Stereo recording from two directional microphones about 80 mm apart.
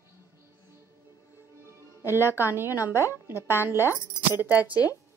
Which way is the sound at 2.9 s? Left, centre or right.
Right.